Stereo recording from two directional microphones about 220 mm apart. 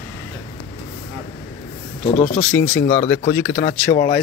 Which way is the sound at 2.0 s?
25° left (ahead or behind).